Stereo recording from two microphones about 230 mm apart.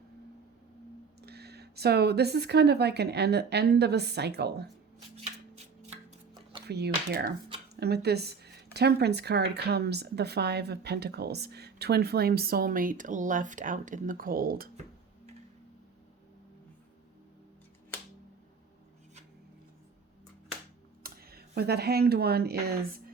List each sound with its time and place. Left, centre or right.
1.2 s speech: right
6.7 s speech: right
21.0 s speech: right